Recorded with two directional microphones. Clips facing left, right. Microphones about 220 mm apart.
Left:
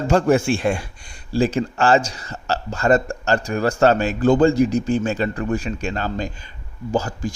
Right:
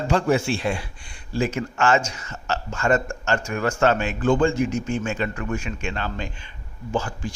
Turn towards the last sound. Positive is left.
turn(degrees=40)  # may be behind; listen again after turning